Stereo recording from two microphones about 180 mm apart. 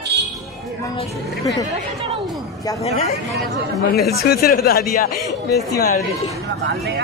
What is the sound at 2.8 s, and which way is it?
Speech, 35° left (ahead or behind).